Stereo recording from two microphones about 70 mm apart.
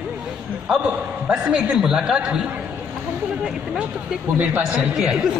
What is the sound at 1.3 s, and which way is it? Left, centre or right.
A woman's voice, centre.